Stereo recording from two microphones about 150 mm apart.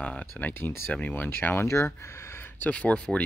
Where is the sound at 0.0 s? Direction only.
10° left (ahead or behind).